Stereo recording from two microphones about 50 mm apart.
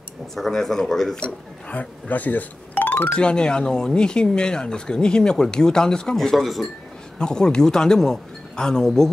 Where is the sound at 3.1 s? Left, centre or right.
Centre.